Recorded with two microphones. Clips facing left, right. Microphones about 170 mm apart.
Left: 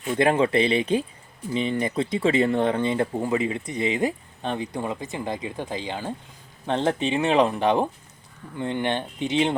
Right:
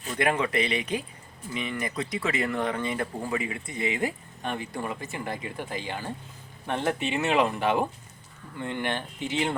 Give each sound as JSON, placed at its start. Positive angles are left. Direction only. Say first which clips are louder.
{"t": 0.1, "sound": "speech", "louder": "left 6 dB", "side_deg": 30}